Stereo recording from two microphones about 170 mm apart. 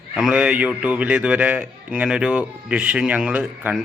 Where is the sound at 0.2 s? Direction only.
5° right (ahead or behind).